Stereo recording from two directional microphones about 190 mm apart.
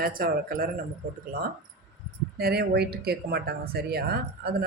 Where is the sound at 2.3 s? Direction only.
55° right (ahead or behind).